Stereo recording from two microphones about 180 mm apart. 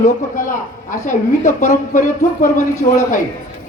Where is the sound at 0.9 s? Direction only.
45° left (ahead or behind).